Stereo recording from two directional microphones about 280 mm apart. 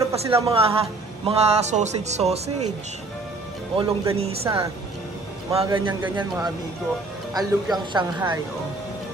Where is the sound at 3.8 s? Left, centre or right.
Centre.